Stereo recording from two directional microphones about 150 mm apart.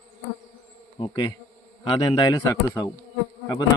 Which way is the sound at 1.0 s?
30° left (ahead or behind).